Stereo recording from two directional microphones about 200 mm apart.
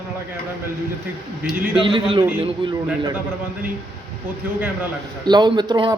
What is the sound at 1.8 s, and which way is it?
Speech, 25° right (ahead or behind).